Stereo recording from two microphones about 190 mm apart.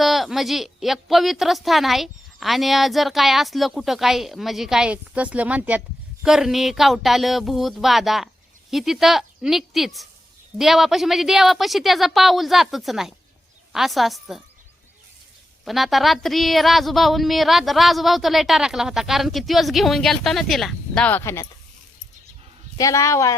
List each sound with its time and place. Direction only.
0.0 s a woman's voice: centre (ahead or behind)
15.6 s a woman's voice: centre (ahead or behind)
22.8 s speech: 15° left (ahead or behind)